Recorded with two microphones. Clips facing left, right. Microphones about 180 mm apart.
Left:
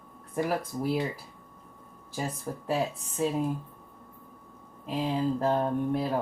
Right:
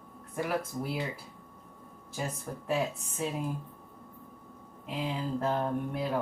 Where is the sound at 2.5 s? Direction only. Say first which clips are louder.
Left 4 dB; 30° left (ahead or behind).